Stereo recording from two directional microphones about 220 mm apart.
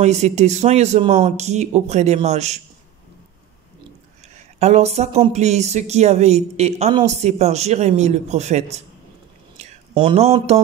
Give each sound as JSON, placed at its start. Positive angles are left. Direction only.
{"t": 0.0, "sound": "speech", "side_deg": -30}
{"t": 4.6, "sound": "speech", "side_deg": -30}